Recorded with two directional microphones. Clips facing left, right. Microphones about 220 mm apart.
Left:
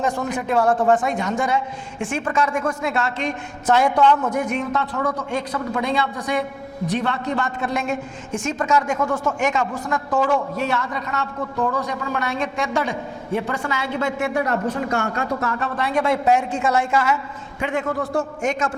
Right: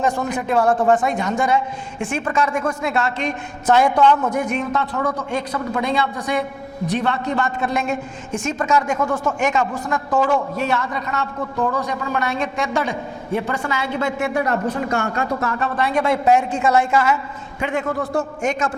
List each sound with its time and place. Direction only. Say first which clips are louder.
0.3 s a woman's voice: even; 20° right (ahead or behind)
3.9 s a woman's voice: right 1 dB; 25° right (ahead or behind)
9.4 s a woman's voice: right 3 dB; 10° right (ahead or behind)
9.7 s speech: right 1 dB; 25° right (ahead or behind)
10.6 s a woman's voice: right 2 dB; 15° right (ahead or behind)
11.3 s a woman's voice: right 1 dB; 25° right (ahead or behind)